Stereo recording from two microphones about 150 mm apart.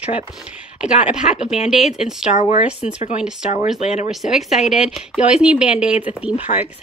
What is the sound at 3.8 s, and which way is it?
Speech, 45° left (ahead or behind).